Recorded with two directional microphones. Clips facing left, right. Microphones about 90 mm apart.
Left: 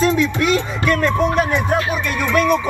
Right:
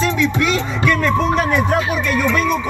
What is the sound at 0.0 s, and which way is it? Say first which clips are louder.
Speech: left 1 dB; 35° left (ahead or behind).